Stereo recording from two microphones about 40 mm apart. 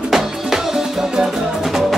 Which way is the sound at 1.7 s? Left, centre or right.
Centre.